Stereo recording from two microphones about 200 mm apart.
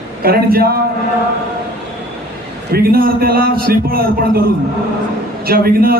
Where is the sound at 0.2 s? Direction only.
50° right (ahead or behind).